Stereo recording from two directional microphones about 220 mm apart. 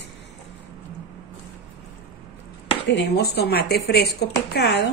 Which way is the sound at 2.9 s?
50° left (ahead or behind).